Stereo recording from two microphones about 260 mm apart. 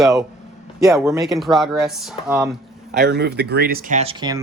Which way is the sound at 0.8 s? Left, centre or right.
Centre.